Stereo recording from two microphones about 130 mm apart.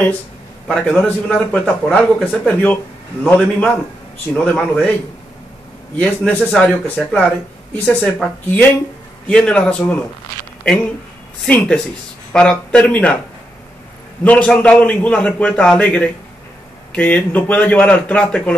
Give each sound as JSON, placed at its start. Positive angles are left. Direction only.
{"t": 0.7, "sound": "a man's voice", "side_deg": 10}
{"t": 5.9, "sound": "a man's voice", "side_deg": 10}
{"t": 11.4, "sound": "a man's voice", "side_deg": 10}
{"t": 14.2, "sound": "a man's voice", "side_deg": 10}